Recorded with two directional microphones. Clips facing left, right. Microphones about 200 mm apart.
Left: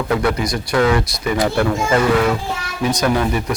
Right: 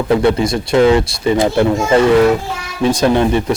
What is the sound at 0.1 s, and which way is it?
Speech, 25° right (ahead or behind).